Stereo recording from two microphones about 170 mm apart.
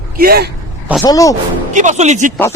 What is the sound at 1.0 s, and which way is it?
Speech, 20° left (ahead or behind).